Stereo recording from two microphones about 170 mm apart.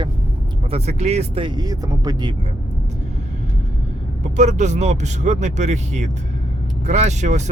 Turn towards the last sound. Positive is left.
turn(degrees=-45)  # may be behind; listen again after turning